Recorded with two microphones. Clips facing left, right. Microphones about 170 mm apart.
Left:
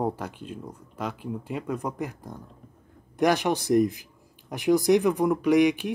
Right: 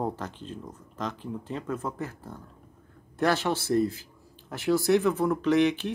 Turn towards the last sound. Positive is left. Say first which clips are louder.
# left 3 dB
turn(degrees=10)  # may be behind; listen again after turning